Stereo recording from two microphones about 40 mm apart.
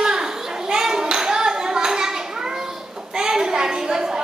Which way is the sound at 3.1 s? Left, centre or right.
Centre.